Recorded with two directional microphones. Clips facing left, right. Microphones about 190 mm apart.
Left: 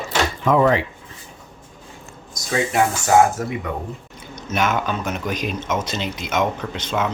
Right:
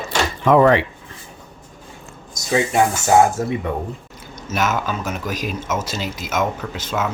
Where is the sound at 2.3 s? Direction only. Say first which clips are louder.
Right 2 dB; 25° right (ahead or behind).